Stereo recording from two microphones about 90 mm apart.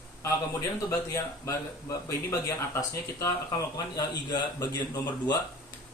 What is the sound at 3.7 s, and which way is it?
Speech, 45° left (ahead or behind).